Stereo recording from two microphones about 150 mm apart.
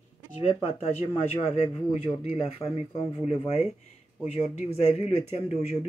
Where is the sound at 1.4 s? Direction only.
40° left (ahead or behind).